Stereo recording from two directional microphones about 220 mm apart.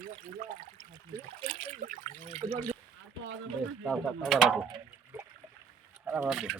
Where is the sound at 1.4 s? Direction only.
25° right (ahead or behind).